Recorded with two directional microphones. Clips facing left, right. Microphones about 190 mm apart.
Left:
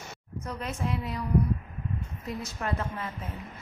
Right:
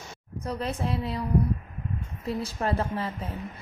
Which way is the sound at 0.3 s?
35° right (ahead or behind).